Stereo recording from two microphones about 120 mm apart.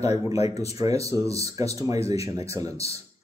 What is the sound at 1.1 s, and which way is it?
A man's voice, 30° right (ahead or behind).